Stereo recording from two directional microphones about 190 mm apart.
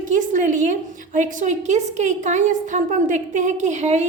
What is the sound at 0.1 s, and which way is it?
A woman's voice, 40° right (ahead or behind).